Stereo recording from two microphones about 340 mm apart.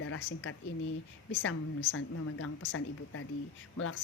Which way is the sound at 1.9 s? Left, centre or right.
Left.